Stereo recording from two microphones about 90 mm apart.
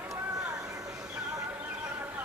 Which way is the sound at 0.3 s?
35° right (ahead or behind).